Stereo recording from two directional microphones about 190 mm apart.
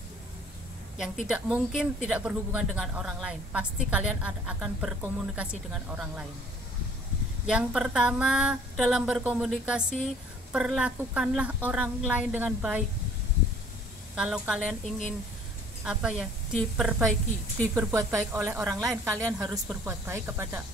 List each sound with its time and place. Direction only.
1.2 s a woman's voice: 5° right (ahead or behind)
7.4 s speech: 5° right (ahead or behind)
14.1 s speech: 5° right (ahead or behind)
17.7 s a woman's voice: 15° right (ahead or behind)